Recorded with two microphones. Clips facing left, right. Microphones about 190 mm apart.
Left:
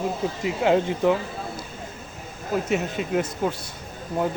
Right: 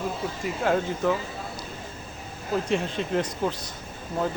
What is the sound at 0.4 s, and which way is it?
Speech, 20° left (ahead or behind).